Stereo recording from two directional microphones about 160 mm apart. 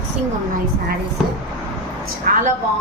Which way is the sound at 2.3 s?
60° right (ahead or behind).